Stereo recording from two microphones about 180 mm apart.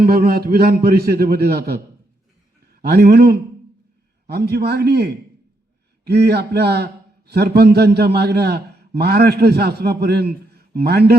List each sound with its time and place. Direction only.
0.0 s a man's voice: 55° right (ahead or behind)
2.8 s a man's voice: 65° right (ahead or behind)